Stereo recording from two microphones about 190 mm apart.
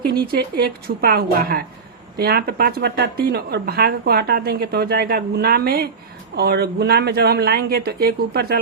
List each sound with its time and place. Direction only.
0.2 s a woman's voice: 55° right (ahead or behind)